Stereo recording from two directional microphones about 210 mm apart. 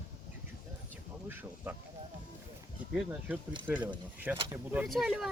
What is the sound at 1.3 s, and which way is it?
Speech, 10° right (ahead or behind).